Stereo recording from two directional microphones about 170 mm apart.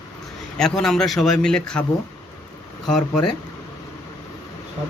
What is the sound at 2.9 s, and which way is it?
Speech, 5° left (ahead or behind).